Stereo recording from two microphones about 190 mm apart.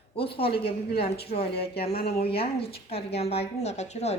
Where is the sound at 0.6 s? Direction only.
55° left (ahead or behind).